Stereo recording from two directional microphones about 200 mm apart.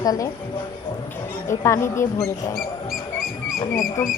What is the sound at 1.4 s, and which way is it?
Speech, 15° left (ahead or behind).